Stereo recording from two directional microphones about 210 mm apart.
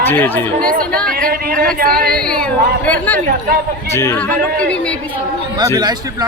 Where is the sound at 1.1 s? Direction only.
45° right (ahead or behind).